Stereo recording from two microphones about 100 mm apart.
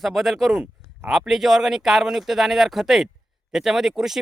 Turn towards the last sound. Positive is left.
turn(degrees=-5)  # may be behind; listen again after turning